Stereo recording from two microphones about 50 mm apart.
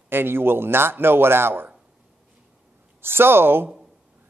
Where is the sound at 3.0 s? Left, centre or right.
Right.